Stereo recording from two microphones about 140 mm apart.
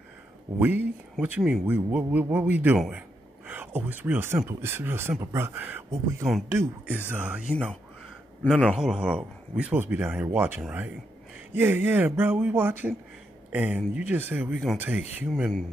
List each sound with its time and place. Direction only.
0.6 s speech: 15° right (ahead or behind)
8.6 s speech: 5° right (ahead or behind)